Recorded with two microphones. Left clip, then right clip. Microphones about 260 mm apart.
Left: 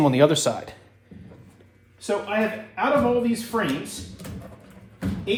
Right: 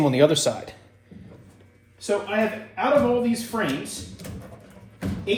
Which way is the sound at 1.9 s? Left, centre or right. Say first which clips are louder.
Right 1 dB; left.